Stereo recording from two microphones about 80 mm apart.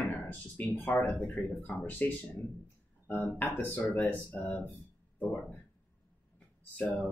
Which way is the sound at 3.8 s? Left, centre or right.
Centre.